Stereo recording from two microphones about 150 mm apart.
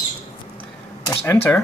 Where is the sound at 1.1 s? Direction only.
15° left (ahead or behind).